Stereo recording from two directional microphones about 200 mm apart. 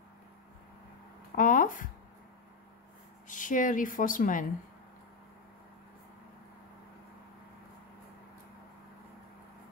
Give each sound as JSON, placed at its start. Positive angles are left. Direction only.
{"t": 1.3, "sound": "speech", "side_deg": 40}
{"t": 3.3, "sound": "speech", "side_deg": 40}